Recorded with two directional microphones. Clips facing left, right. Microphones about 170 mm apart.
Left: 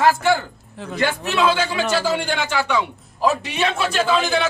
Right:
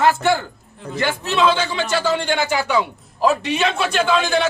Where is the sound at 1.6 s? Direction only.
10° left (ahead or behind).